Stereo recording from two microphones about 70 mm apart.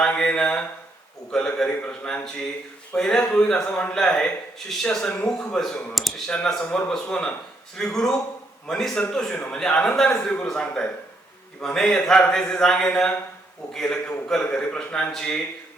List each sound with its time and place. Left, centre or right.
0.0 s speech: centre
6.2 s a man's voice: centre